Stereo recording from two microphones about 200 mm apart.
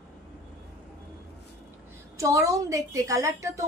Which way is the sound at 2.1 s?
15° right (ahead or behind).